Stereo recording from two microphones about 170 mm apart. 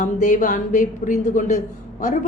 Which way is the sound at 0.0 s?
45° left (ahead or behind).